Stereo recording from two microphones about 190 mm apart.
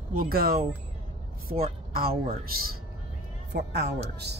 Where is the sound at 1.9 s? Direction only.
50° right (ahead or behind).